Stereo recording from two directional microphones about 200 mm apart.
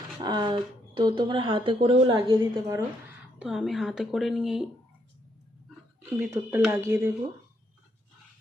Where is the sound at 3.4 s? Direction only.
Centre (ahead or behind).